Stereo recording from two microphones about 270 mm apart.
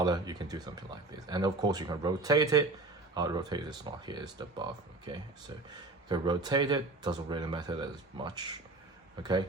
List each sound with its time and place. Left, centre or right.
0.0 s speech: centre